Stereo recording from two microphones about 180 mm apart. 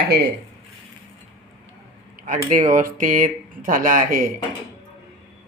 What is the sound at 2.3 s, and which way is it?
Speech, 45° right (ahead or behind).